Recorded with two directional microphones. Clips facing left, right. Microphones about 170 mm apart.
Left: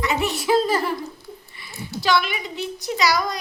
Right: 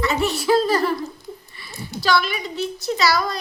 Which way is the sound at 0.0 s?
15° left (ahead or behind).